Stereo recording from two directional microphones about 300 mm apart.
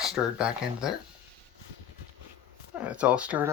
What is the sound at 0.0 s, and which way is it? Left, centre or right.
Speech, centre.